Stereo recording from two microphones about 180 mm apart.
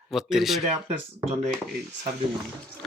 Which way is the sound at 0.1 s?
Centre (ahead or behind).